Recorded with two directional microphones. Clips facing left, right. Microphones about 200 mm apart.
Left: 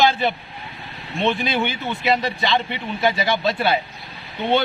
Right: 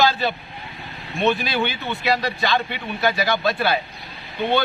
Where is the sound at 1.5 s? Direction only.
20° left (ahead or behind).